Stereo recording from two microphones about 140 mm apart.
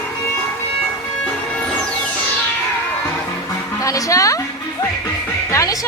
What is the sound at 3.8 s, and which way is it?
Music, 25° left (ahead or behind).